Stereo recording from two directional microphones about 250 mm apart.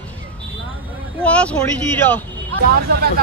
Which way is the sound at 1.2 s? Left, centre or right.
Centre.